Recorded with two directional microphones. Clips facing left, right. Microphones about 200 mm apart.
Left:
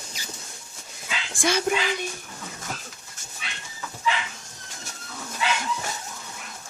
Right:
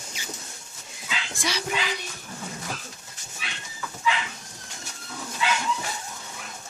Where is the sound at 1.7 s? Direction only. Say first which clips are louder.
Left 4 dB; 50° left (ahead or behind).